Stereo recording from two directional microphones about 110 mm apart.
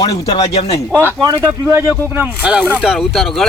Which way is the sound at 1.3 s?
20° right (ahead or behind).